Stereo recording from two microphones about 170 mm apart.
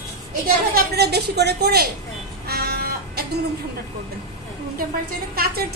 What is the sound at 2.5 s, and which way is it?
Buzzer, 65° right (ahead or behind).